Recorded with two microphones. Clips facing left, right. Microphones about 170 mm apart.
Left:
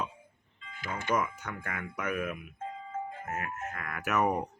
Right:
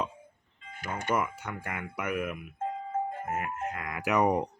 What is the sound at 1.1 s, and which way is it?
Speech, 10° right (ahead or behind).